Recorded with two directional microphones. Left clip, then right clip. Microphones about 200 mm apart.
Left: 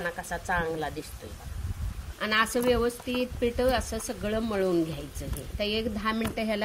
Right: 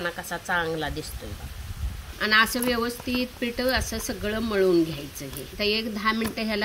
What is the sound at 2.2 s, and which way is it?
Speech, 20° left (ahead or behind).